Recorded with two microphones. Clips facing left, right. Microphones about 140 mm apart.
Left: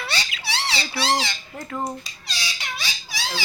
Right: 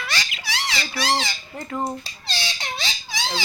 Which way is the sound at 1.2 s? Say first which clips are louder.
Even; centre (ahead or behind).